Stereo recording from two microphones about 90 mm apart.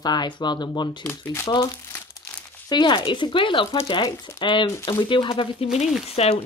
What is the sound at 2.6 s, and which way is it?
Speech, 55° left (ahead or behind).